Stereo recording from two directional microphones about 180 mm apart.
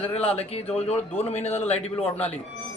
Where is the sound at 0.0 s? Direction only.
35° left (ahead or behind).